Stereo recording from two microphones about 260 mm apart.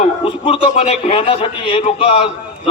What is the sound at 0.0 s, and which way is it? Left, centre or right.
A man's voice, centre.